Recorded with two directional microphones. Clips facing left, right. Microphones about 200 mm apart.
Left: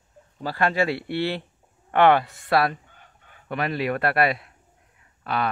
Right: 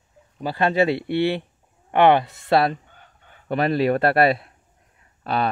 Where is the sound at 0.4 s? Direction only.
20° right (ahead or behind).